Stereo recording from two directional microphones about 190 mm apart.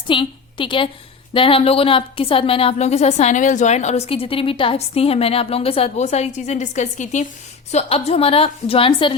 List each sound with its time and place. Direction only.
0.1 s a woman's voice: 25° left (ahead or behind)